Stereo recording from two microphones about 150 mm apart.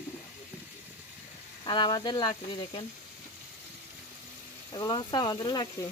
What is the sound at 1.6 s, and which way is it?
Speech, 30° left (ahead or behind).